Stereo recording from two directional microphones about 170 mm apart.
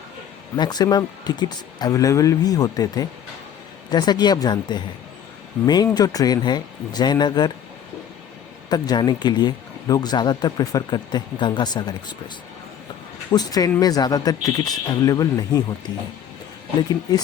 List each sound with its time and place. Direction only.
0.5 s speech: 25° left (ahead or behind)
8.7 s speech: 25° left (ahead or behind)
13.3 s speech: 20° left (ahead or behind)